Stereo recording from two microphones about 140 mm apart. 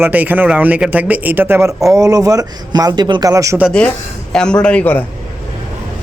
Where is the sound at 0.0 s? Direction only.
10° right (ahead or behind).